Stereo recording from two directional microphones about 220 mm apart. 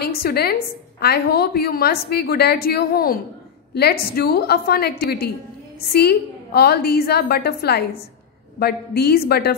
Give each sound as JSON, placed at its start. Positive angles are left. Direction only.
{"t": 0.0, "sound": "a woman's voice", "side_deg": 45}